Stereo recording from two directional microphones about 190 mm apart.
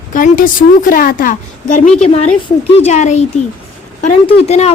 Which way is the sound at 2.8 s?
35° left (ahead or behind).